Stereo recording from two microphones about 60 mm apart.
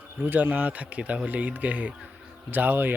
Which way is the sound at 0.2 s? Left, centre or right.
Right.